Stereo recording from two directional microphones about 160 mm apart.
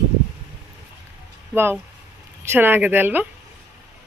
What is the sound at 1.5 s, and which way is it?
A woman's voice, 15° right (ahead or behind).